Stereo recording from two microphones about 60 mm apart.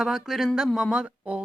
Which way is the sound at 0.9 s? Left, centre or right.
Centre.